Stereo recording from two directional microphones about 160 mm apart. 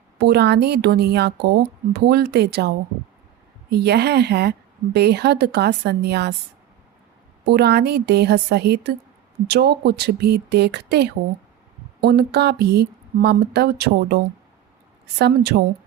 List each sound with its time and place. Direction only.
0.2 s a woman's voice: 90° right
7.4 s a woman's voice: 90° right